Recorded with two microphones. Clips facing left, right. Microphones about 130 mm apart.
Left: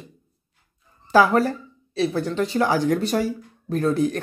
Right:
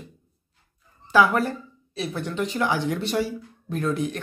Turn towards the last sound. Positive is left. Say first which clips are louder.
# left 5 dB
turn(degrees=35)  # may be behind; listen again after turning